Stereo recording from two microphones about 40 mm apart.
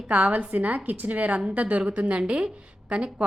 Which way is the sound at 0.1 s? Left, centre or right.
Right.